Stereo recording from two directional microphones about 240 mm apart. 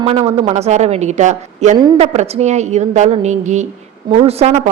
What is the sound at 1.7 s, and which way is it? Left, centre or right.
A woman's voice, centre.